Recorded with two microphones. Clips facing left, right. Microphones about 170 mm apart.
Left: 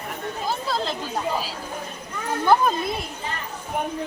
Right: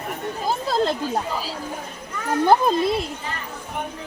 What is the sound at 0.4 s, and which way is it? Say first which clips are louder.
Chatter: right 5 dB; 45° right (ahead or behind).